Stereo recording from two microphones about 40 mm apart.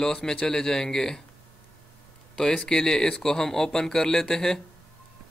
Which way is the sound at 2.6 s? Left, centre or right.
Centre.